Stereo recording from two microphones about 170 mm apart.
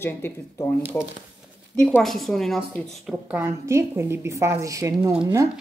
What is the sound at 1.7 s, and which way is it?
Speech, 5° left (ahead or behind).